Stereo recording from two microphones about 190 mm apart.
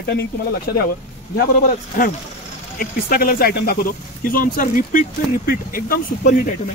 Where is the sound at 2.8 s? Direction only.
50° left (ahead or behind).